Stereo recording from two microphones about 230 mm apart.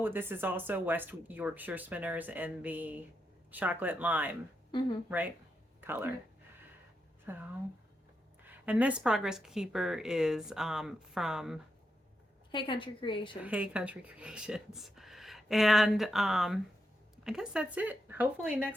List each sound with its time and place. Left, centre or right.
0.0 s speech: centre
7.3 s speech: centre
12.5 s a woman's voice: left
13.4 s speech: centre